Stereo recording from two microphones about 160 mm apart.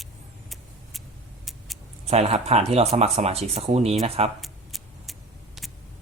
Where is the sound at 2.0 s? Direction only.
40° right (ahead or behind).